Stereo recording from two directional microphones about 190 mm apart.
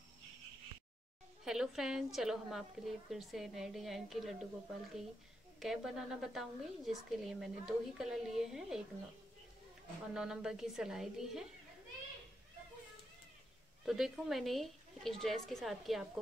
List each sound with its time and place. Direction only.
1.4 s a woman's voice: 5° right (ahead or behind)
10.1 s a woman's voice: 5° right (ahead or behind)
13.8 s a woman's voice: centre (ahead or behind)